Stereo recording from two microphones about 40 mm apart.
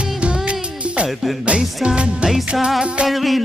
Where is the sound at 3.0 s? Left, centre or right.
Centre.